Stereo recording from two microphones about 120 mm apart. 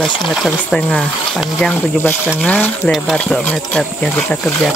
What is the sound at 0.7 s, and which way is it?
Speech, 5° left (ahead or behind).